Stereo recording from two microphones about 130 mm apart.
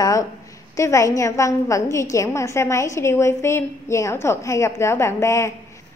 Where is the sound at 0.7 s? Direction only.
25° left (ahead or behind).